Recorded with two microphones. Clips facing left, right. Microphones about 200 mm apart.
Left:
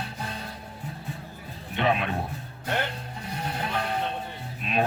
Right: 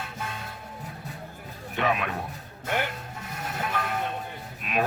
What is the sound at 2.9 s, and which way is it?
Music, 25° left (ahead or behind).